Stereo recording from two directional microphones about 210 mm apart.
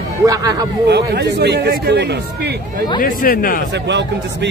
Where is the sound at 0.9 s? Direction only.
50° right (ahead or behind).